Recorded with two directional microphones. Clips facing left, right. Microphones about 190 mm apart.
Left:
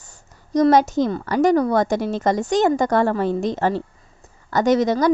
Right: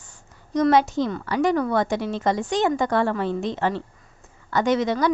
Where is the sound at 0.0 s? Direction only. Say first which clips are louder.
Left 1 dB; 40° left (ahead or behind).